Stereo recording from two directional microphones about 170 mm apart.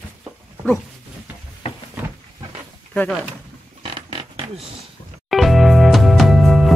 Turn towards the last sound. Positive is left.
turn(degrees=0)  # may be behind; listen again after turning